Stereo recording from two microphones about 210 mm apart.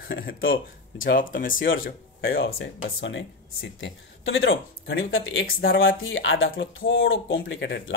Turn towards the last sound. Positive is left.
turn(degrees=55)  # may be behind; listen again after turning